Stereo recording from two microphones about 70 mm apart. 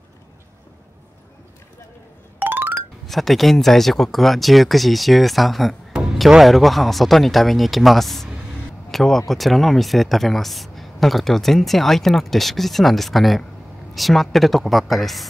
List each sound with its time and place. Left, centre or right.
2.3 s music: right
3.1 s speech: centre